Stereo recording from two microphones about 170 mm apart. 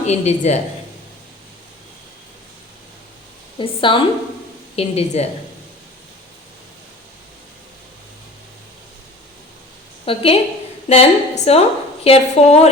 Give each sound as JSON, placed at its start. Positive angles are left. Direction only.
{"t": 0.0, "sound": "a woman's voice", "side_deg": 40}
{"t": 3.6, "sound": "a woman's voice", "side_deg": 30}
{"t": 10.1, "sound": "a woman's voice", "side_deg": 35}